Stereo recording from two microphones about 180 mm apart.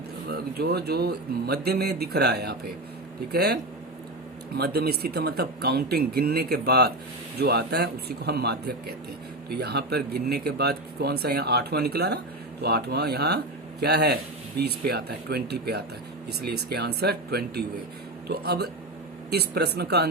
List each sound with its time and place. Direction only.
0.3 s speech: 60° right (ahead or behind)